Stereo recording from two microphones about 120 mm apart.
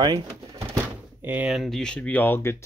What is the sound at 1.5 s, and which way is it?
Speech, centre (ahead or behind).